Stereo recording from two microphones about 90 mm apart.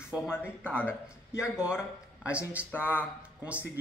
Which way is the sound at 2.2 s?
15° right (ahead or behind).